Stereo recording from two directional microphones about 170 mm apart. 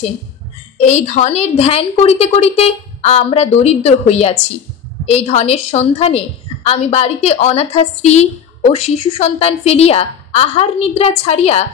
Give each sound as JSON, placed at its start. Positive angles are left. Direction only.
{"t": 0.7, "sound": "a woman's voice", "side_deg": 40}